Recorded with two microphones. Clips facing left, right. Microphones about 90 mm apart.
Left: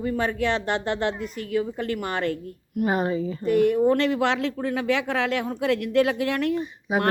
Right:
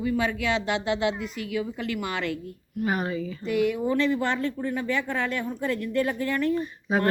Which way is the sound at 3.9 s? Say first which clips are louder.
Left 2 dB; 70° left (ahead or behind).